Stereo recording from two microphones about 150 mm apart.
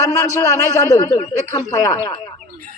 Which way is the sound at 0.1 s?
20° left (ahead or behind).